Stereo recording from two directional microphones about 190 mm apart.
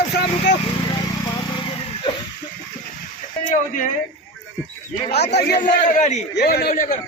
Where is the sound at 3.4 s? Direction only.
45° left (ahead or behind).